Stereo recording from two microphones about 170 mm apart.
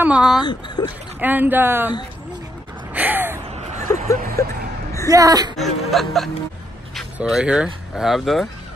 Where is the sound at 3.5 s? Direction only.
40° right (ahead or behind).